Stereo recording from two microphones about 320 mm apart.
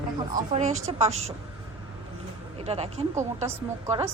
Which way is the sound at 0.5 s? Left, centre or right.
Right.